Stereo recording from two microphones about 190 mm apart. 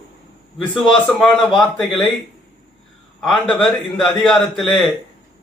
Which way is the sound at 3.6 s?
5° left (ahead or behind).